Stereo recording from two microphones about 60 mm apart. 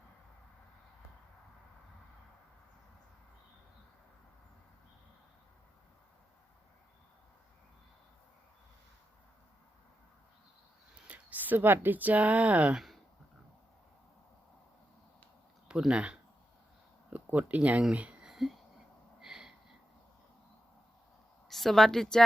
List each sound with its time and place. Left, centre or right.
11.1 s speech: right
12.7 s speech: centre
15.9 s speech: centre
17.1 s speech: right
17.9 s a sound: right
18.3 s whispering: centre
19.2 s a sound: centre
21.5 s a woman's voice: centre